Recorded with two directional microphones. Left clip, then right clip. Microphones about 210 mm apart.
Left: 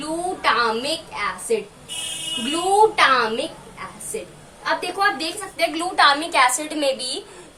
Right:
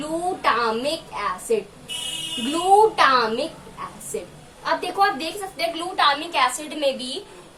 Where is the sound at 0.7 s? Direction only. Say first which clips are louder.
Left 1 dB; 5° left (ahead or behind).